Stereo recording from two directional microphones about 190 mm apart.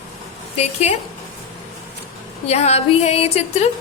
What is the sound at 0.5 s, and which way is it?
Speech, 35° left (ahead or behind).